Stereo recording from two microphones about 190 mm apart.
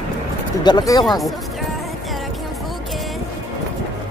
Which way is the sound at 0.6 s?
20° left (ahead or behind).